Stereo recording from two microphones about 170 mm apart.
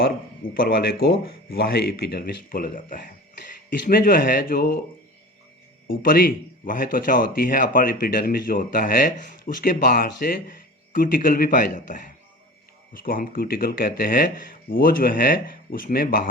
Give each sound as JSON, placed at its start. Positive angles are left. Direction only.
{"t": 0.5, "sound": "speech", "side_deg": 60}
{"t": 6.0, "sound": "speech", "side_deg": 55}